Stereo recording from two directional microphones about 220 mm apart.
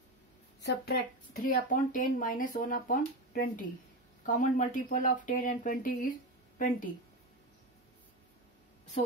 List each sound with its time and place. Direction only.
0.6 s a woman's voice: 50° left (ahead or behind)
1.3 s speech: 35° left (ahead or behind)